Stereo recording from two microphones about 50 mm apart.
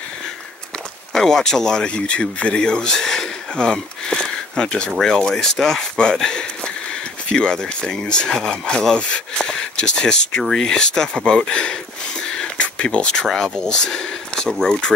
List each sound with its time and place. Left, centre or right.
1.1 s speech: centre
12.4 s a sound: left
14.6 s speech: centre